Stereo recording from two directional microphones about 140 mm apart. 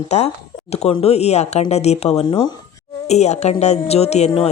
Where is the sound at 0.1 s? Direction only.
50° left (ahead or behind).